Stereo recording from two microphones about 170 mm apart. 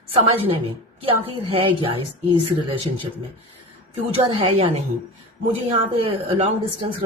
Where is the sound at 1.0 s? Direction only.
30° right (ahead or behind).